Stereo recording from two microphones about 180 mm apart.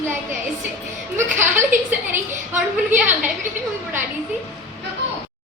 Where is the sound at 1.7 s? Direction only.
10° right (ahead or behind).